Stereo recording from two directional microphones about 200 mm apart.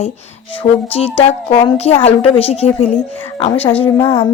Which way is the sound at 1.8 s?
30° left (ahead or behind).